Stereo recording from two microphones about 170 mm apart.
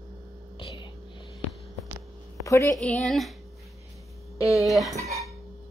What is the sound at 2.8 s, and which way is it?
Speech, centre (ahead or behind).